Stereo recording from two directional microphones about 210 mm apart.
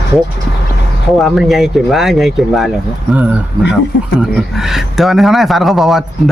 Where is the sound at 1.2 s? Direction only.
Centre (ahead or behind).